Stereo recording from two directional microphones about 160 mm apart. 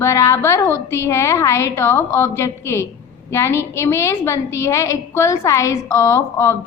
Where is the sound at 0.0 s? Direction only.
15° left (ahead or behind).